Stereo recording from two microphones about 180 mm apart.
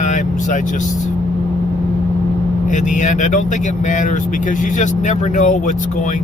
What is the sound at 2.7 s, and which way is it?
Speech, 45° left (ahead or behind).